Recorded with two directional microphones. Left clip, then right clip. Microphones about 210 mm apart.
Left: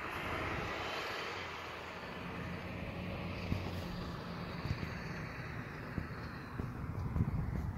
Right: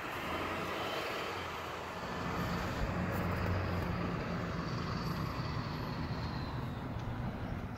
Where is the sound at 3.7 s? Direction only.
40° right (ahead or behind).